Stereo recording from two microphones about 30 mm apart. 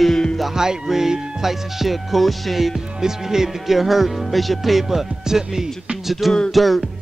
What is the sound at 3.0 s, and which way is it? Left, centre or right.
Speech, centre.